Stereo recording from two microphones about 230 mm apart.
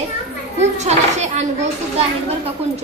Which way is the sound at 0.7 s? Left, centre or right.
Right.